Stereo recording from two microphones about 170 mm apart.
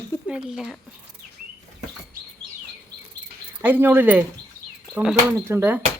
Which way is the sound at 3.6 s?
10° right (ahead or behind).